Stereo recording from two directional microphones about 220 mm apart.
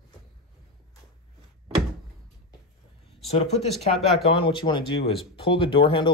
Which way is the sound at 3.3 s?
30° left (ahead or behind).